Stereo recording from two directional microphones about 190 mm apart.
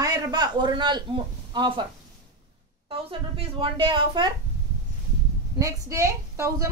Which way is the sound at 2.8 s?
30° right (ahead or behind).